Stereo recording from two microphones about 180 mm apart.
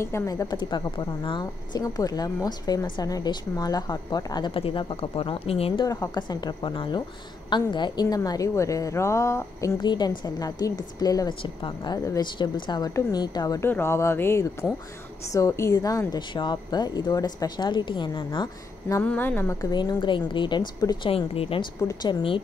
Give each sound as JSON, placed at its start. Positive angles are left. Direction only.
{"t": 0.0, "sound": "a woman's voice", "side_deg": 15}
{"t": 19.0, "sound": "a woman's voice", "side_deg": 10}
{"t": 19.7, "sound": "a woman's voice", "side_deg": 25}